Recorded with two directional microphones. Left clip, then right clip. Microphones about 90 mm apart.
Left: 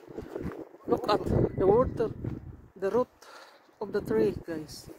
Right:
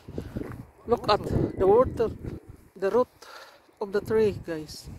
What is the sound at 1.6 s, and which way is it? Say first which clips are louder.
Speech: right 4 dB; 40° right (ahead or behind).